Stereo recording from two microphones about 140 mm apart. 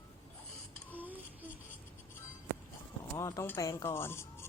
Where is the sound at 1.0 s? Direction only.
10° right (ahead or behind).